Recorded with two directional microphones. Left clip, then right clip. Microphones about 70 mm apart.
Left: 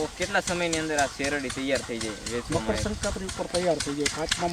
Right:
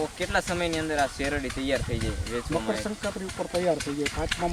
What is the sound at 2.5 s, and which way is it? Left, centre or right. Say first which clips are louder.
Speech: even; left.